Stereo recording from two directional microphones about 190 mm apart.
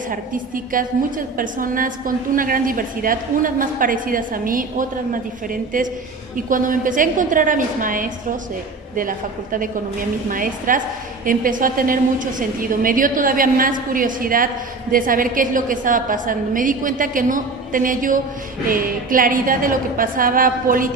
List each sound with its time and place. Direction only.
0.1 s a woman's voice: 45° right (ahead or behind)